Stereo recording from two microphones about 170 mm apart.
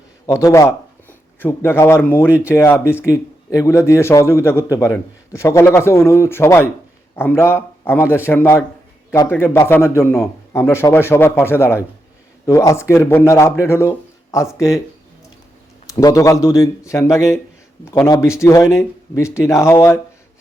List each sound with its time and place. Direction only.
0.3 s a man's voice: 15° left (ahead or behind)
16.0 s a man's voice: 20° left (ahead or behind)